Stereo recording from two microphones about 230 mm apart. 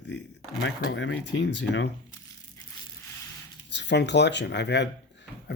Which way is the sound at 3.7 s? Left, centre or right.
Left.